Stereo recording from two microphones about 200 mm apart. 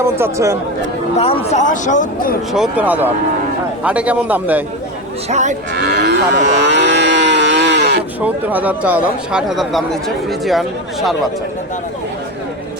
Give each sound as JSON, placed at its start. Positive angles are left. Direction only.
{"t": 0.0, "sound": "a man's voice", "side_deg": -15}
{"t": 1.2, "sound": "speech", "side_deg": 30}
{"t": 2.5, "sound": "a man's voice", "side_deg": -5}
{"t": 5.3, "sound": "cattle", "side_deg": -35}
{"t": 5.7, "sound": "livestock", "side_deg": -55}
{"t": 8.2, "sound": "speech", "side_deg": -10}